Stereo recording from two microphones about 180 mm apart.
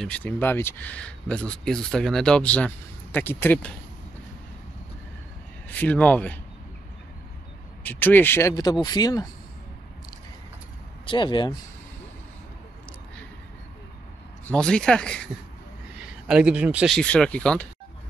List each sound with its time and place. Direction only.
0.0 s speech: 5° left (ahead or behind)
5.7 s speech: 10° left (ahead or behind)
7.8 s speech: 10° left (ahead or behind)
11.1 s speech: 25° left (ahead or behind)
14.4 s speech: 5° left (ahead or behind)
16.3 s speech: 5° right (ahead or behind)